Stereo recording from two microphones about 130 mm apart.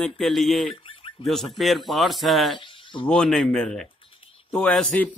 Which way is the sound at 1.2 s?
Centre (ahead or behind).